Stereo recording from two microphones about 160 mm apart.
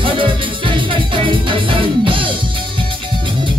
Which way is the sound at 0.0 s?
30° right (ahead or behind).